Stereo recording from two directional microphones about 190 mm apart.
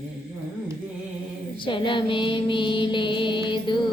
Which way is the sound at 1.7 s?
25° left (ahead or behind).